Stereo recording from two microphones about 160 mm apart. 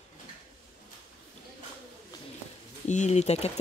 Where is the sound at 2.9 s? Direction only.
45° left (ahead or behind).